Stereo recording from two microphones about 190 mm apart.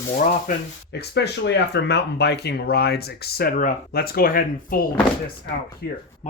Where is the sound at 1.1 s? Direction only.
60° left (ahead or behind).